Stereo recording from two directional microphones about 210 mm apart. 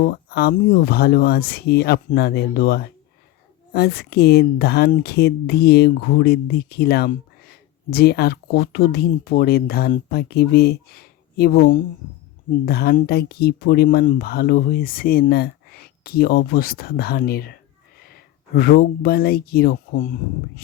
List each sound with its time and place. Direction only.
0.0 s speech: 50° left (ahead or behind)